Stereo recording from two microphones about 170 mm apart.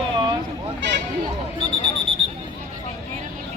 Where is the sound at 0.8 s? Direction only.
90° right.